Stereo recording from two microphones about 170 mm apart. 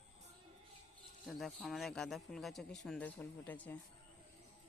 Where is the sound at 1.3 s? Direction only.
Centre (ahead or behind).